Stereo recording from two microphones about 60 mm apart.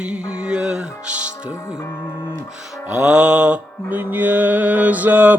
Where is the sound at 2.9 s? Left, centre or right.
Centre.